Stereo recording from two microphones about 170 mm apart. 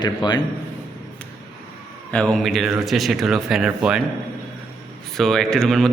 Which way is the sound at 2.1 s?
5° left (ahead or behind).